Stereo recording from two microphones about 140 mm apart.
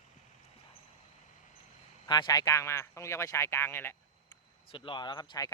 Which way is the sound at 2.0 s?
30° left (ahead or behind).